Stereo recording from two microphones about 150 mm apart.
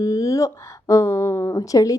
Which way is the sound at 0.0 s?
20° left (ahead or behind).